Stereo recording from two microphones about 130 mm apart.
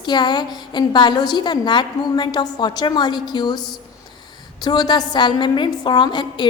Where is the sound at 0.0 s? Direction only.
35° left (ahead or behind).